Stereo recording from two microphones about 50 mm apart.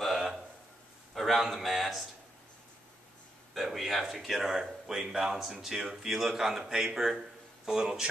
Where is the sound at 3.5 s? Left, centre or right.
Centre.